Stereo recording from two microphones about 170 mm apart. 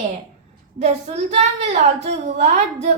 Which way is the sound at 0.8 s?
40° right (ahead or behind).